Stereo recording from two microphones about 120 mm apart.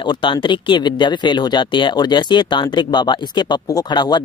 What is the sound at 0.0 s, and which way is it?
Speech, 40° left (ahead or behind).